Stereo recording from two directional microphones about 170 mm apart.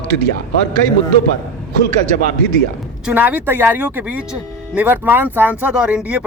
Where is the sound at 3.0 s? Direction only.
10° right (ahead or behind).